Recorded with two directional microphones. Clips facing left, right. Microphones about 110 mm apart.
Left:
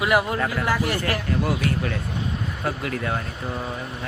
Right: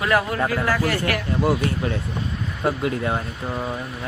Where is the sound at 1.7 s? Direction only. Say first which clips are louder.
Right 1 dB; 25° right (ahead or behind).